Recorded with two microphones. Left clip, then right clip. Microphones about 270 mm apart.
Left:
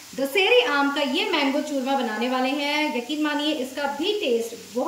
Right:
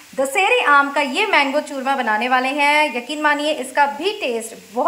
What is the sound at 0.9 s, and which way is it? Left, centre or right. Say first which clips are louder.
A woman's voice: right 7 dB; right.